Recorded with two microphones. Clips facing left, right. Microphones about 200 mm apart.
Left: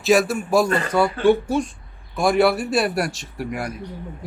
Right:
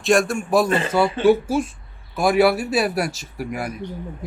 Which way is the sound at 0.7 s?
25° right (ahead or behind).